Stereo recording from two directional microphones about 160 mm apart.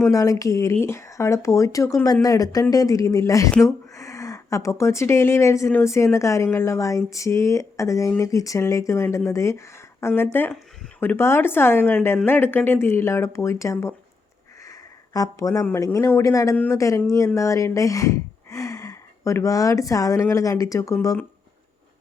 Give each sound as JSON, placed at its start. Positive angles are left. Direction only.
{"t": 0.0, "sound": "a woman's voice", "side_deg": 20}
{"t": 15.1, "sound": "speech", "side_deg": 20}